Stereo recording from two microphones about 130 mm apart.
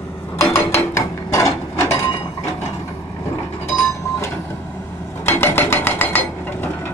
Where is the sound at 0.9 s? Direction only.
25° left (ahead or behind).